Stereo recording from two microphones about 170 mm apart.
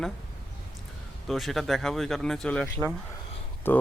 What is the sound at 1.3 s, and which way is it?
Speech, centre (ahead or behind).